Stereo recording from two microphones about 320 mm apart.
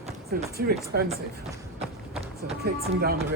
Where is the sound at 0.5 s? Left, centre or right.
Right.